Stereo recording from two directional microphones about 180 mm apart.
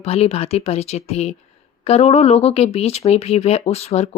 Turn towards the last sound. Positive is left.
turn(degrees=35)  # may be behind; listen again after turning